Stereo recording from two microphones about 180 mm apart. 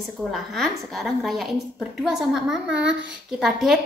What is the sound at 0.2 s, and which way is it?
A woman's voice, centre (ahead or behind).